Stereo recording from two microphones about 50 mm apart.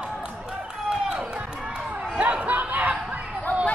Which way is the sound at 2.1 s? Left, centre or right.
Right.